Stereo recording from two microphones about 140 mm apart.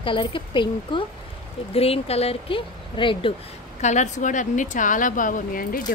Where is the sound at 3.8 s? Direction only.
60° left (ahead or behind).